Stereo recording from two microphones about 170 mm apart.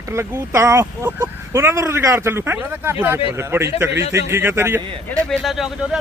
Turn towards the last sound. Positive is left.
turn(degrees=0)  # may be behind; listen again after turning